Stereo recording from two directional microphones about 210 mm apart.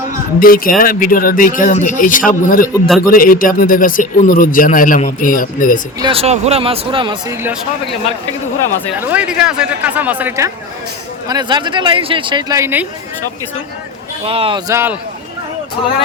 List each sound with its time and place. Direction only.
0.3 s speech: 45° left (ahead or behind)
6.0 s speech: 25° right (ahead or behind)
9.0 s speech: 5° right (ahead or behind)
14.3 s speech: 25° right (ahead or behind)
14.7 s speech: 10° right (ahead or behind)